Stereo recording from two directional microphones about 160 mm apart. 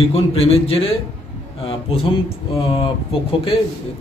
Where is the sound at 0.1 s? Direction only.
35° left (ahead or behind).